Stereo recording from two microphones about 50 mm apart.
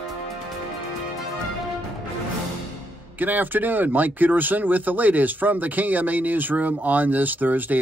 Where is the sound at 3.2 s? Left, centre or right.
Right.